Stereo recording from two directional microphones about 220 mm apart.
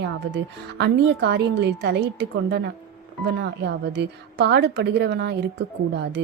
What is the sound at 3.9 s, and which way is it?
Speech, 50° right (ahead or behind).